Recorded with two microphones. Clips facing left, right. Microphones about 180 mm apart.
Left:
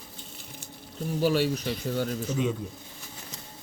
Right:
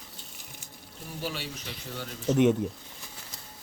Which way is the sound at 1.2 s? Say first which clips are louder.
Left 12 dB; 45° left (ahead or behind).